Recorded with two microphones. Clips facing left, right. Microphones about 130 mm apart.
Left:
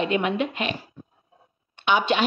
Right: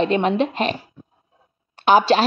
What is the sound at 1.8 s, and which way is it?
Speech, 35° right (ahead or behind).